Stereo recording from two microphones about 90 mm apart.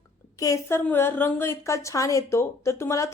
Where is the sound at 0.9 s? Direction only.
25° left (ahead or behind).